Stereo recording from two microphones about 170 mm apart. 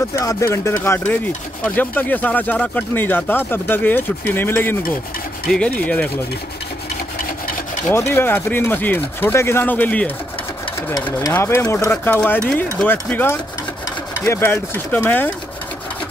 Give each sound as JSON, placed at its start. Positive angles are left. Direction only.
{"t": 0.1, "sound": "speech", "side_deg": 20}
{"t": 7.9, "sound": "speech", "side_deg": 15}
{"t": 11.0, "sound": "speech", "side_deg": 25}
{"t": 11.3, "sound": "speech", "side_deg": 15}